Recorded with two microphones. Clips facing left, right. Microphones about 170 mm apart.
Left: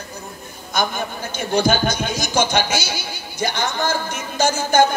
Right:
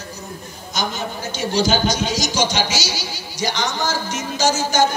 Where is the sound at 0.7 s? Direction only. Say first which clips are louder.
Left 2 dB; 55° left (ahead or behind).